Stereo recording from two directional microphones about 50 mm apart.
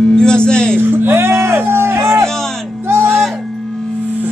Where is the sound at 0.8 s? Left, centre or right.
Right.